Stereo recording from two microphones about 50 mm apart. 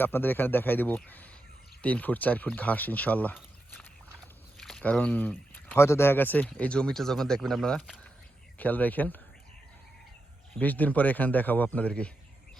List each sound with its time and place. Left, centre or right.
0.0 s a man's voice: left
4.2 s a sound: centre
4.8 s speech: left
5.7 s speech: left
6.6 s speech: centre
8.5 s speech: left
10.6 s a man's voice: left